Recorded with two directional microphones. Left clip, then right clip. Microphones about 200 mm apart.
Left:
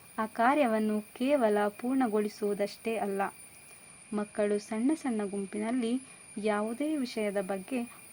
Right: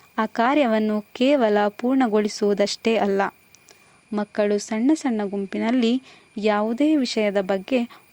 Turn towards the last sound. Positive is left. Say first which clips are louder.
# right 12 dB
turn(degrees=-40)  # may be behind; listen again after turning